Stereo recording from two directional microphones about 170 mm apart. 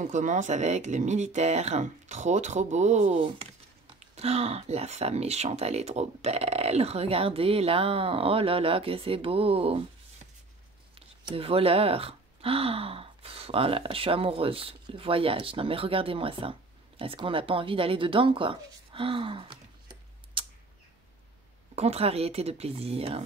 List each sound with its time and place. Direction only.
0.0 s speech: 45° right (ahead or behind); by 20.4 s 30° right (ahead or behind)
21.7 s speech: 40° right (ahead or behind)